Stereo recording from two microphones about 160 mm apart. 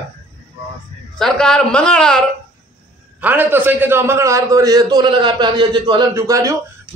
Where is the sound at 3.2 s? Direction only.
10° right (ahead or behind).